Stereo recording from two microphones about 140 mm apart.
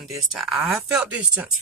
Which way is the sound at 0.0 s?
Centre (ahead or behind).